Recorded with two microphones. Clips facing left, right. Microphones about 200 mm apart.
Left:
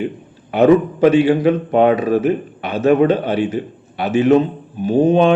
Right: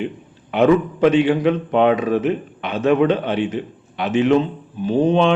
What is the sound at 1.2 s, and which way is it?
A man's voice, 40° left (ahead or behind).